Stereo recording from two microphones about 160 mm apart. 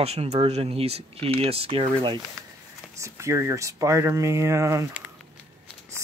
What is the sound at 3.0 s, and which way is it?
Speech, 15° right (ahead or behind).